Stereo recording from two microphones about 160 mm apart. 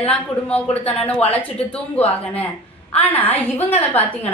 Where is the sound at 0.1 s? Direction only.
10° left (ahead or behind).